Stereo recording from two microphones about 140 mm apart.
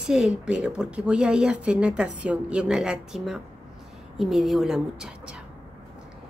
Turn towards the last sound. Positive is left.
turn(degrees=-5)  # may be behind; listen again after turning